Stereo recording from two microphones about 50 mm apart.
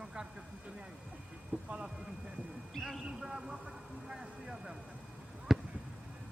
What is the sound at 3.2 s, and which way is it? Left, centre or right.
Speech, centre.